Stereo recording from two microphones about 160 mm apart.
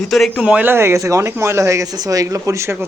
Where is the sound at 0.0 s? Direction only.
Centre (ahead or behind).